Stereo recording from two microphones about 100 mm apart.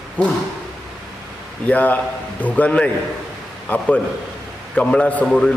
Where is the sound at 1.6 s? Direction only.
15° left (ahead or behind).